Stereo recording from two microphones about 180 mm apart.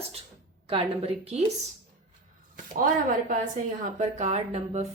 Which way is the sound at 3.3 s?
45° right (ahead or behind).